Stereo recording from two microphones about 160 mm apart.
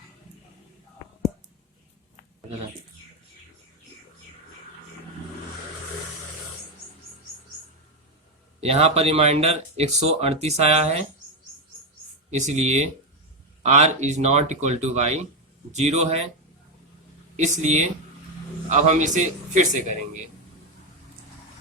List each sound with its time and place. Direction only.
8.6 s speech: 40° right (ahead or behind)
12.3 s speech: 45° right (ahead or behind)
17.3 s speech: 50° right (ahead or behind)